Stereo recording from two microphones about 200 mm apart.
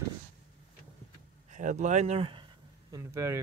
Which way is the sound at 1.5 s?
40° right (ahead or behind).